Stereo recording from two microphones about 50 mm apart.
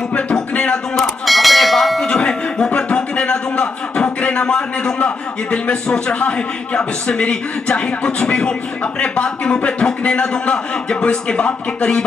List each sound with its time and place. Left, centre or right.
0.1 s music: left
0.9 s bell: centre
2.0 s a sound: centre
4.9 s a man's voice: left